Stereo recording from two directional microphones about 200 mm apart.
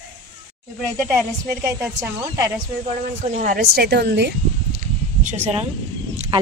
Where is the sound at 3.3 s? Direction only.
35° right (ahead or behind).